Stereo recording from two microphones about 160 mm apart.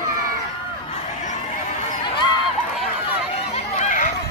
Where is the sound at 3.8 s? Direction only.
55° left (ahead or behind).